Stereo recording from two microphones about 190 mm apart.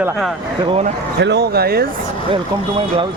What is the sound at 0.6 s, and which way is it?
Speech, 25° right (ahead or behind).